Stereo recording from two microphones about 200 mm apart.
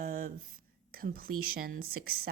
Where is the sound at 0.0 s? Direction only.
45° right (ahead or behind).